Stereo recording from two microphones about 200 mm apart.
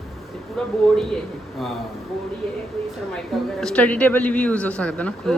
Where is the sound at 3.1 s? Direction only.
Centre (ahead or behind).